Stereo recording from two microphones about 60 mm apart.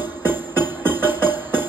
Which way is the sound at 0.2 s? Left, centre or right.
Right.